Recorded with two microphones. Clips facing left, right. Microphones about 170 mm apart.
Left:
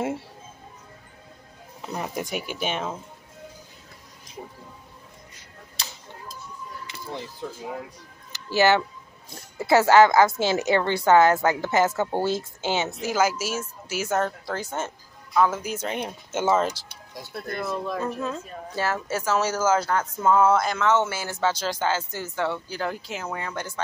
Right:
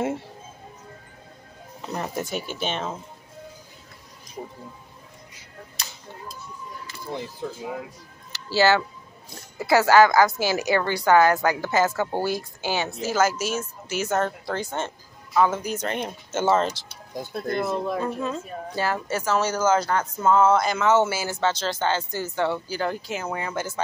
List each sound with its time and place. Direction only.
2.0 s speech: 10° left (ahead or behind)
8.3 s music: 20° left (ahead or behind)
9.6 s a woman's voice: 25° left (ahead or behind)
13.0 s speech: 10° left (ahead or behind)
17.3 s speech: 25° right (ahead or behind)
18.2 s speech: centre (ahead or behind)
20.6 s speech: 5° right (ahead or behind)
21.4 s speech: 10° left (ahead or behind)